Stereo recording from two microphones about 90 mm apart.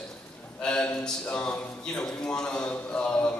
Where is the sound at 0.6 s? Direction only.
10° left (ahead or behind).